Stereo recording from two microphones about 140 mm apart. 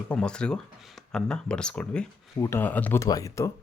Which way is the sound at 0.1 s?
5° left (ahead or behind).